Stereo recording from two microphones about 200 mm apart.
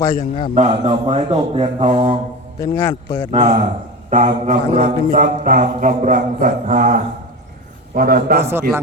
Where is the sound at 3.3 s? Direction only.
35° right (ahead or behind).